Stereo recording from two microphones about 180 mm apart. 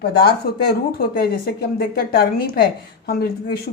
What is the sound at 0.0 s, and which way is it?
Speech, 65° left (ahead or behind).